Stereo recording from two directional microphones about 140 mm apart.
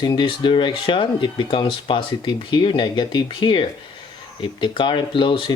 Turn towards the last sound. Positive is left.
turn(degrees=35)  # may be behind; listen again after turning